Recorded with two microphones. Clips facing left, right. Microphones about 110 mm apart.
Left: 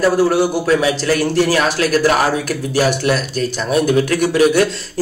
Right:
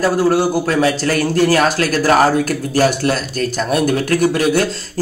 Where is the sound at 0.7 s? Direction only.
45° right (ahead or behind).